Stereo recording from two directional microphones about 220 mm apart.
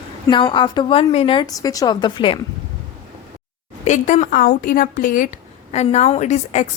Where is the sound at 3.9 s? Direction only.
30° left (ahead or behind).